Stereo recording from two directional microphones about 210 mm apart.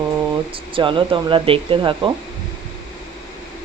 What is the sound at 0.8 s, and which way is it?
Speech, 25° right (ahead or behind).